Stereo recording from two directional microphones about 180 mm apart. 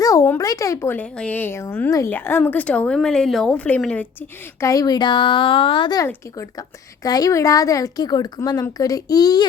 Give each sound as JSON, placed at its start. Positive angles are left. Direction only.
{"t": 0.0, "sound": "speech", "side_deg": 15}
{"t": 4.6, "sound": "a woman's voice", "side_deg": 20}